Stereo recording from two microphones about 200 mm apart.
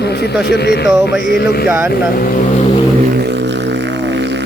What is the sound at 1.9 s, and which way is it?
Music, 45° left (ahead or behind).